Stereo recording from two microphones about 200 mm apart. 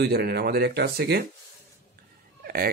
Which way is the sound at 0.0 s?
50° right (ahead or behind).